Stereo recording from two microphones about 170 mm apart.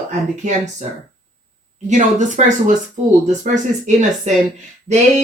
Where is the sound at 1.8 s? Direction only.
45° right (ahead or behind).